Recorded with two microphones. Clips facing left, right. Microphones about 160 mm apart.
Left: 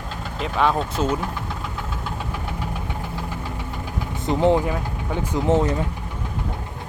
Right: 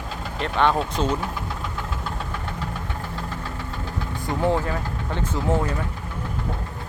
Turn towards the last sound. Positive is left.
turn(degrees=20)  # may be behind; listen again after turning